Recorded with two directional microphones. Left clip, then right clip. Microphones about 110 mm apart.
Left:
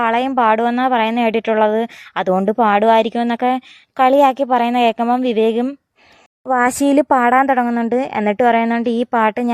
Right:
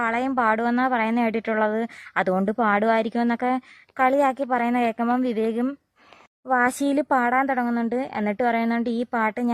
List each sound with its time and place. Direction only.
0.0 s a woman's voice: 30° left (ahead or behind)